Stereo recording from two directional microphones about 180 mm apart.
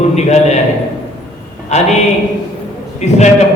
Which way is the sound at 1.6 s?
40° left (ahead or behind).